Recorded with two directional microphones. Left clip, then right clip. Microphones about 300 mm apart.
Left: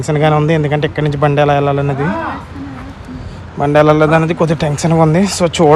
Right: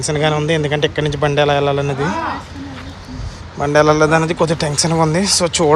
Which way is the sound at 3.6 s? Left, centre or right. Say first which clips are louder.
Left 3 dB; centre.